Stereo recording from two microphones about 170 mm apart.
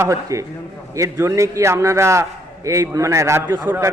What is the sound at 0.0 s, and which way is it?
A man's voice, 20° right (ahead or behind).